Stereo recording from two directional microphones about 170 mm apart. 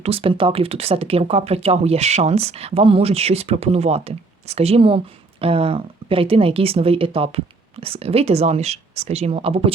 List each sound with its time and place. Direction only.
0.0 s speech: 35° right (ahead or behind)